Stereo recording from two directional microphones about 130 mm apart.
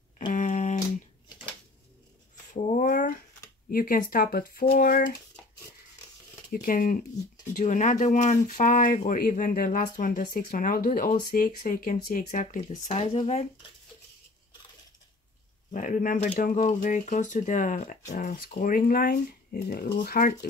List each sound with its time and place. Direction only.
0.2 s a sound: 90° left; by 0.8 s 70° left (ahead or behind)
2.5 s a sound: 65° left (ahead or behind); by 3.2 s 90° left
3.7 s speech: 90° left
6.5 s speech: 90° left
7.5 s speech: 70° left (ahead or behind); by 13.5 s 55° left (ahead or behind)
15.7 s speech: 85° left